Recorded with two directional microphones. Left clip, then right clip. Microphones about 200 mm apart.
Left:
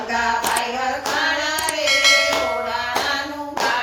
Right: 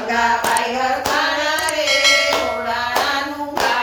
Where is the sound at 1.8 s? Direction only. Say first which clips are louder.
Even; centre (ahead or behind).